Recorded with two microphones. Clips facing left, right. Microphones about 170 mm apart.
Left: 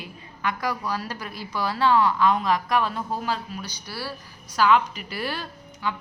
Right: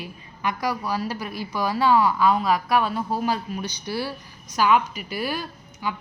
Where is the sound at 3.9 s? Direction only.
15° right (ahead or behind).